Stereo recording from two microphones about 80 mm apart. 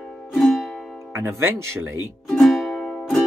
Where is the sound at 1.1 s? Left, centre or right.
Right.